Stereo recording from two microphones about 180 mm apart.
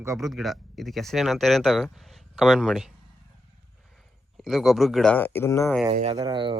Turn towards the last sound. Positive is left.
turn(degrees=-25)  # may be behind; listen again after turning